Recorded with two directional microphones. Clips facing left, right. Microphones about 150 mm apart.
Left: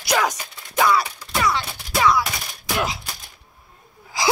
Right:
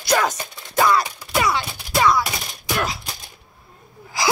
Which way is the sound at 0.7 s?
Centre (ahead or behind).